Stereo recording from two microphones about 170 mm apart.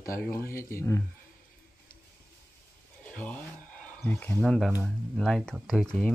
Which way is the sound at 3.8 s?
10° left (ahead or behind).